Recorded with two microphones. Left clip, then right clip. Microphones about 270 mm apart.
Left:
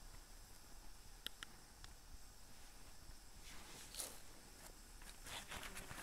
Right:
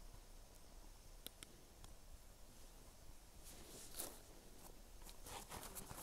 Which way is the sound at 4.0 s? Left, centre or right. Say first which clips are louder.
Left 1 dB; right.